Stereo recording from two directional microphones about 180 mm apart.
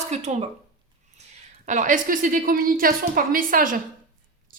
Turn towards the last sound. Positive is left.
turn(degrees=-50)  # may be behind; listen again after turning